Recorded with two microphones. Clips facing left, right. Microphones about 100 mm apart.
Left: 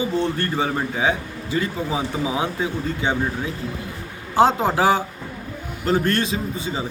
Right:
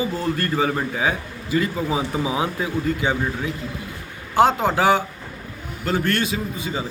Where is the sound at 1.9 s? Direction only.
25° right (ahead or behind).